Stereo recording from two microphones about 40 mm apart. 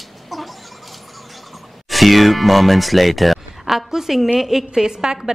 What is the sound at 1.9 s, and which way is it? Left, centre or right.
A woman's voice, centre.